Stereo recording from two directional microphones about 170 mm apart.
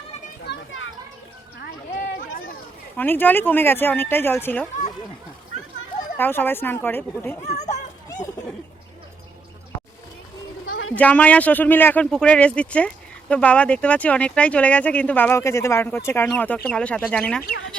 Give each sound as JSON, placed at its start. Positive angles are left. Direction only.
{"t": 0.5, "sound": "children playing", "side_deg": 75}
{"t": 3.0, "sound": "speech", "side_deg": 10}
{"t": 6.1, "sound": "speech", "side_deg": 10}
{"t": 7.4, "sound": "a sound", "side_deg": 40}
{"t": 10.9, "sound": "speech", "side_deg": 10}